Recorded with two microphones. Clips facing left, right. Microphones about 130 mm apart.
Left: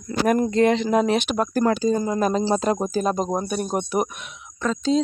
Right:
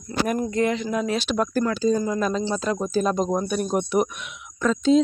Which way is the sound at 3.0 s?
40° left (ahead or behind).